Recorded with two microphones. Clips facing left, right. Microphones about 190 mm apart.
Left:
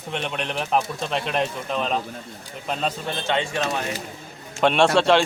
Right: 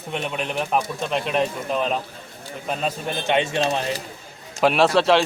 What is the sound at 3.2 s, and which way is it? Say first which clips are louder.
Speech: right 4 dB; 20° right (ahead or behind).